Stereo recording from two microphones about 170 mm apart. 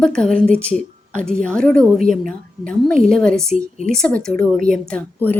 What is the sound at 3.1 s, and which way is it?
A woman's voice, 5° left (ahead or behind).